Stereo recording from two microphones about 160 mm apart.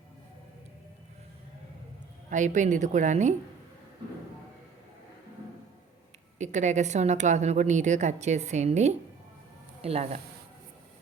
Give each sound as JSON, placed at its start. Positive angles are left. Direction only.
{"t": 2.3, "sound": "a woman's voice", "side_deg": -50}
{"t": 6.4, "sound": "a woman's voice", "side_deg": -45}